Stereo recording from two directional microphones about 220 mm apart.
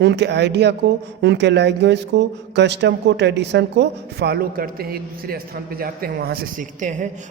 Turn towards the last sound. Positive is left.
turn(degrees=-35)  # may be behind; listen again after turning